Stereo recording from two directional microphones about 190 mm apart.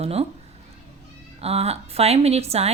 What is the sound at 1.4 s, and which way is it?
A woman's voice, 30° right (ahead or behind).